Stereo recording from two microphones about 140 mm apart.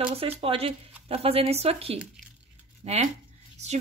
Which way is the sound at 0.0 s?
45° right (ahead or behind).